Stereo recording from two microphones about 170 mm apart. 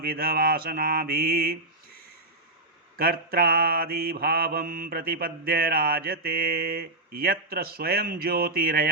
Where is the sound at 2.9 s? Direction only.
60° right (ahead or behind).